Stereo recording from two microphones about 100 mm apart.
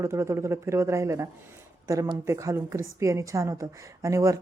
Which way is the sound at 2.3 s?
30° right (ahead or behind).